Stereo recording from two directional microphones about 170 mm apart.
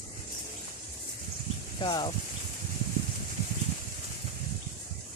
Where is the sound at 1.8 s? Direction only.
25° left (ahead or behind).